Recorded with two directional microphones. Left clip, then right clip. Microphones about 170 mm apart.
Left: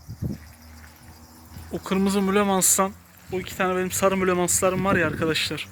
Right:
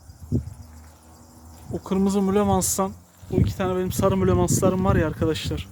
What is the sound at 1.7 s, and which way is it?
Speech, 15° right (ahead or behind).